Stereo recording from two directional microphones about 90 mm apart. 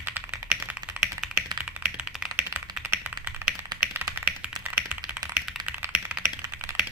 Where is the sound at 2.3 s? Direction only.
20° right (ahead or behind).